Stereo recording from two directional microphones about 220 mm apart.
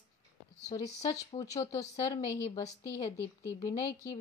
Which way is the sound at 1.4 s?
15° left (ahead or behind).